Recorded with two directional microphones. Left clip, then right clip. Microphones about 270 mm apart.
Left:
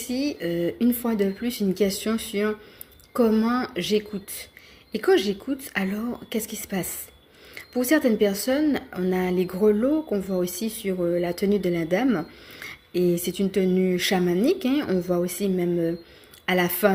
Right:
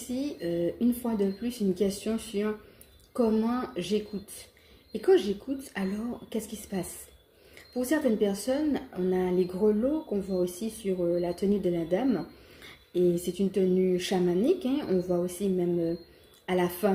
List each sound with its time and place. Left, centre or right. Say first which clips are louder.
0.1 s speech: left 5 dB; left